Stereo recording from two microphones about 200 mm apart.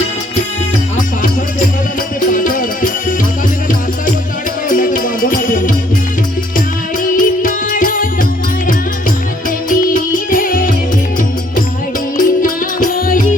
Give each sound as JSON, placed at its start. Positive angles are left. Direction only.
{"t": 0.9, "sound": "music", "side_deg": 40}
{"t": 4.7, "sound": "music", "side_deg": 40}
{"t": 7.0, "sound": "music", "side_deg": 40}
{"t": 12.1, "sound": "music", "side_deg": 45}